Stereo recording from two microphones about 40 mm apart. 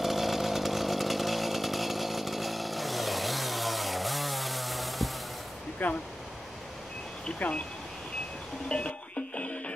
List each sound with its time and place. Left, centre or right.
0.0 s chainsaw: centre
5.8 s speech: left
7.4 s speech: left
8.6 s music: left